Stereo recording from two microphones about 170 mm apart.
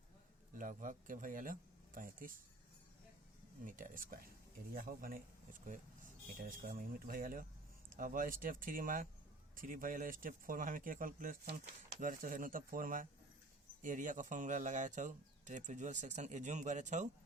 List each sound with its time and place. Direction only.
0.6 s speech: 50° right (ahead or behind)
3.6 s speech: 50° right (ahead or behind)